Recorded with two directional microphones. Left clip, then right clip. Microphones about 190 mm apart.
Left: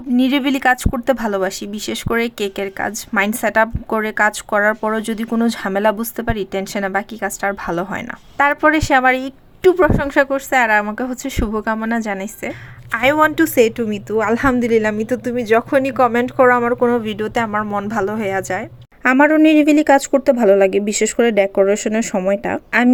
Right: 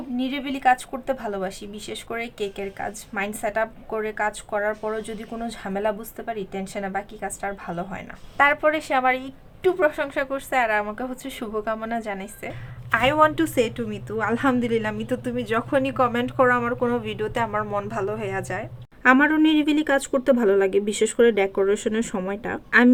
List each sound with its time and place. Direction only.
0.2 s speech: 50° left (ahead or behind)
8.4 s a woman's voice: 35° left (ahead or behind)
19.5 s speech: 20° right (ahead or behind)
19.7 s speech: 25° left (ahead or behind)